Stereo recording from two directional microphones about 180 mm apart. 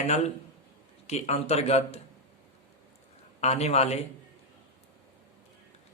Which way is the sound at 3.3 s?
35° left (ahead or behind).